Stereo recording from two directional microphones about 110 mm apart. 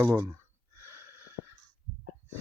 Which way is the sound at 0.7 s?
20° right (ahead or behind).